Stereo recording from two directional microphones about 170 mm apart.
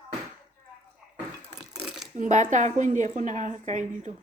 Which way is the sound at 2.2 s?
45° right (ahead or behind).